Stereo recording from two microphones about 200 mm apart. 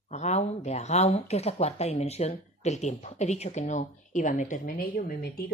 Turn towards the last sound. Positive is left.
turn(degrees=50)  # may be behind; listen again after turning